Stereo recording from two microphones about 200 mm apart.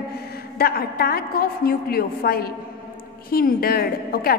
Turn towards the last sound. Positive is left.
turn(degrees=50)  # may be behind; listen again after turning